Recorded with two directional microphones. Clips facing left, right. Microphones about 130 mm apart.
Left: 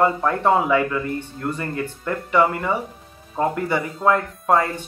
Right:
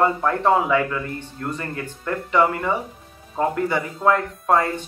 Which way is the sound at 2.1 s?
5° left (ahead or behind).